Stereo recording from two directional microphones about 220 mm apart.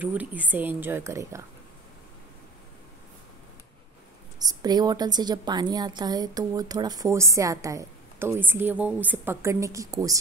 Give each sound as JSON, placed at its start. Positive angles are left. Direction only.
{"t": 0.0, "sound": "a woman's voice", "side_deg": -5}
{"t": 4.4, "sound": "a woman's voice", "side_deg": -20}